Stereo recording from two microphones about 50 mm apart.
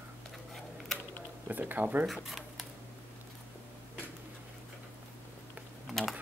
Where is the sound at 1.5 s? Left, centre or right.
Right.